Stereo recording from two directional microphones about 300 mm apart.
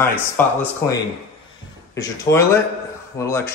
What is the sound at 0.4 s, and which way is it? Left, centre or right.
Speech, centre.